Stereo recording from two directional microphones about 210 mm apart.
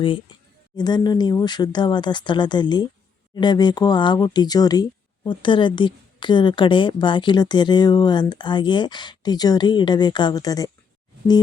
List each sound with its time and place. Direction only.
0.0 s speech: 25° left (ahead or behind)